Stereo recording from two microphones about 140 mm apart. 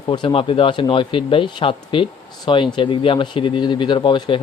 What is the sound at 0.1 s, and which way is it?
Speech, 35° left (ahead or behind).